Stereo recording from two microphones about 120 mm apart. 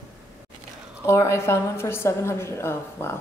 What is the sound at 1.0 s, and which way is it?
A woman's voice, 25° left (ahead or behind).